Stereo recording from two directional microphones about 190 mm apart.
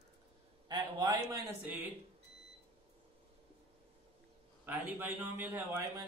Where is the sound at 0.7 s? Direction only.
20° right (ahead or behind).